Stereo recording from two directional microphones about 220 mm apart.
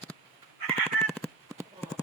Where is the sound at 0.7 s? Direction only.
Centre (ahead or behind).